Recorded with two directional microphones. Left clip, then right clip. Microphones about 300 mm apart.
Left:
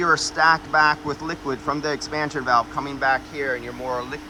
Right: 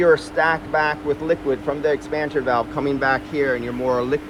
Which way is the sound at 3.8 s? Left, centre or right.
Right.